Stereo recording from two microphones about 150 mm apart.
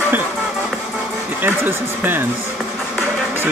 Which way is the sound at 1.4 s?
15° right (ahead or behind).